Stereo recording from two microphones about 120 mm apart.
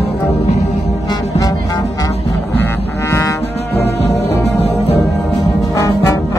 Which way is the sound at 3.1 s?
20° left (ahead or behind).